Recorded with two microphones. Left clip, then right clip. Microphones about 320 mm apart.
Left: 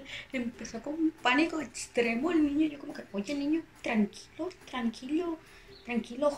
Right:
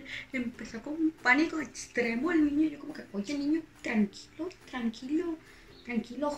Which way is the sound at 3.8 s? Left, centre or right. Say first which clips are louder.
Left 2 dB; centre.